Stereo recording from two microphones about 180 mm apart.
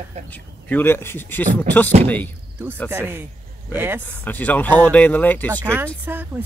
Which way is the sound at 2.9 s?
10° right (ahead or behind).